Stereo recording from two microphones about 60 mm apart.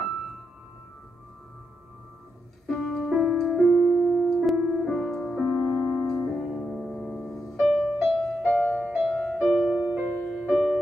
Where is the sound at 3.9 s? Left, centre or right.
Centre.